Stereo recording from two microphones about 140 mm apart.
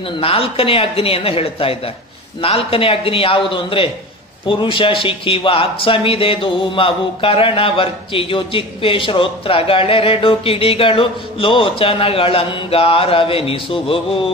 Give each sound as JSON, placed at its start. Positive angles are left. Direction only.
{"t": 0.2, "sound": "a man's voice", "side_deg": 40}